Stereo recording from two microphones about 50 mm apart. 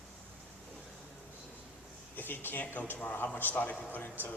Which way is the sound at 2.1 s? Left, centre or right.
Left.